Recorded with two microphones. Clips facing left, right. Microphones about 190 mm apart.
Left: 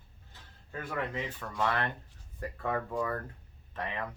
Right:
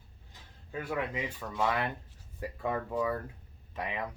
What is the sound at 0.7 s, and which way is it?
Speech, 10° right (ahead or behind).